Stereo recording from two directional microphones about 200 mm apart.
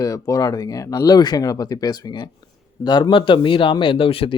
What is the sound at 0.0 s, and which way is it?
Speech, 15° left (ahead or behind).